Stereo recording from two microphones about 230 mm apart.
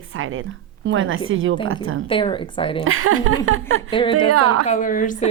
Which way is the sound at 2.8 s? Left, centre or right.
Right.